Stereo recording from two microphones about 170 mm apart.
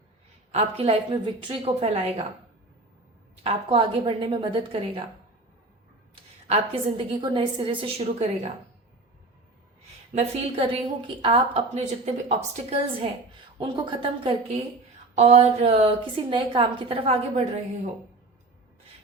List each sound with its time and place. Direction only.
0.5 s a woman's voice: 35° right (ahead or behind)
3.4 s a woman's voice: 30° right (ahead or behind)
6.5 s a woman's voice: 35° right (ahead or behind)
10.2 s a woman's voice: 40° right (ahead or behind)
13.6 s a woman's voice: 30° right (ahead or behind)